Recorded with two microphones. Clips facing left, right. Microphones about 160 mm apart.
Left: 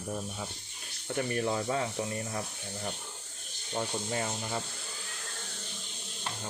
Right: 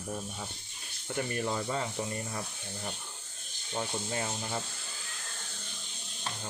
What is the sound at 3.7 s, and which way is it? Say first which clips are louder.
Speech: left 1 dB; centre (ahead or behind).